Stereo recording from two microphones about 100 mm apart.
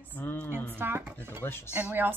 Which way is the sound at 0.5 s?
20° right (ahead or behind).